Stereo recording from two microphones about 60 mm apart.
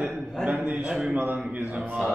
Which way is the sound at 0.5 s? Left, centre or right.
Right.